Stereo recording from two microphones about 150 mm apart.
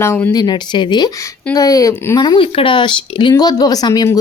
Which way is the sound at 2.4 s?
35° left (ahead or behind).